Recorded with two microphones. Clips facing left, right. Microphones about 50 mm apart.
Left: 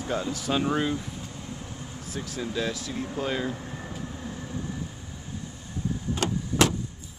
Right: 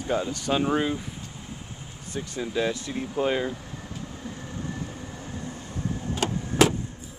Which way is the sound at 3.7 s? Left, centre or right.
Centre.